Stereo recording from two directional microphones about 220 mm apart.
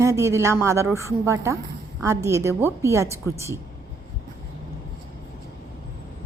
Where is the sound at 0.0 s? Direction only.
15° right (ahead or behind).